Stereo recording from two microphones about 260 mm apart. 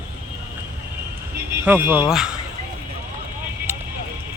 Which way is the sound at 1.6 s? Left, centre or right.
Centre.